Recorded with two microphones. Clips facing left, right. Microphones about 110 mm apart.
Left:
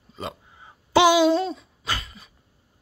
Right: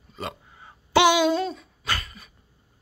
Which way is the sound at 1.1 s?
30° left (ahead or behind).